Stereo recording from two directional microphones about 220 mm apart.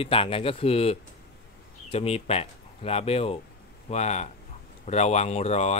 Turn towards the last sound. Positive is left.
turn(degrees=30)  # may be behind; listen again after turning